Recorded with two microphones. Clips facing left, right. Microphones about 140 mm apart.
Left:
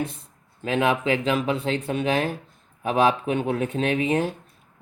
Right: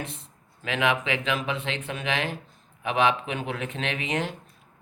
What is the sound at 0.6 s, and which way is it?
Speech, 40° left (ahead or behind).